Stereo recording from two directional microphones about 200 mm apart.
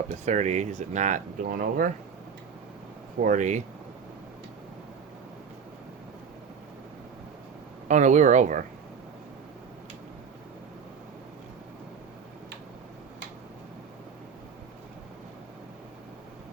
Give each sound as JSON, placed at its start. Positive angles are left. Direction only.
{"t": 0.1, "sound": "speech", "side_deg": -35}
{"t": 3.2, "sound": "speech", "side_deg": -40}
{"t": 7.9, "sound": "speech", "side_deg": -40}